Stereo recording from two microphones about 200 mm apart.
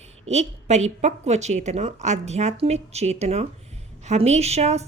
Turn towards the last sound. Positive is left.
turn(degrees=-35)  # may be behind; listen again after turning